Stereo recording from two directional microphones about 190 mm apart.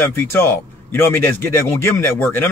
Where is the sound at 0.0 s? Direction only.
10° left (ahead or behind).